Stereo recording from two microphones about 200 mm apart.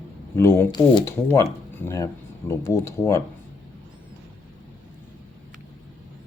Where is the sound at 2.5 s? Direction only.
15° left (ahead or behind).